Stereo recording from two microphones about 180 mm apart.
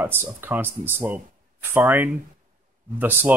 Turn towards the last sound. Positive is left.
turn(degrees=-10)  # may be behind; listen again after turning